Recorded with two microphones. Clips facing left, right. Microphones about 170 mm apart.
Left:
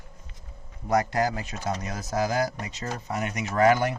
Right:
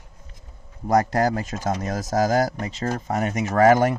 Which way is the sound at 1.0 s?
40° right (ahead or behind).